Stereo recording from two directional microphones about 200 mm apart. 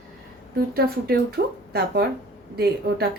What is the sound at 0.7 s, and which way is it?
A woman's voice, 50° right (ahead or behind).